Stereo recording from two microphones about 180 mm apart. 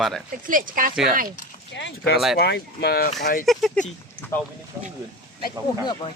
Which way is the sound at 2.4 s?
65° left (ahead or behind).